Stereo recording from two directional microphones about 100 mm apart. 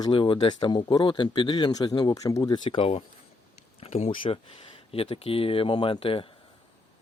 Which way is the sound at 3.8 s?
90° left.